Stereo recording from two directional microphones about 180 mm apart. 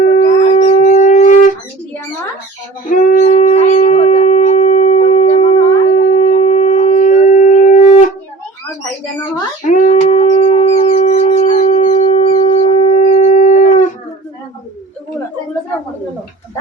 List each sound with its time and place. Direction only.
0.0 s dog: 45° left (ahead or behind)
2.9 s howl: 45° left (ahead or behind)
9.6 s a sound: 45° left (ahead or behind)